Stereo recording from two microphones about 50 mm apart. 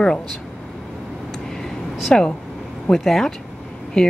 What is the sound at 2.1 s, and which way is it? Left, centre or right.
Speech, centre.